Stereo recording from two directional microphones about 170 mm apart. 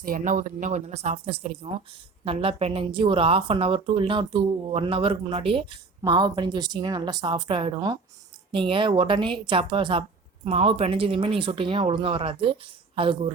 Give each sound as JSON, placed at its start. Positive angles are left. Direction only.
{"t": 0.0, "sound": "speech", "side_deg": -55}